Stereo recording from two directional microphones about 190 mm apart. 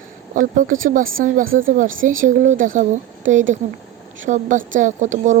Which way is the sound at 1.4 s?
90° right.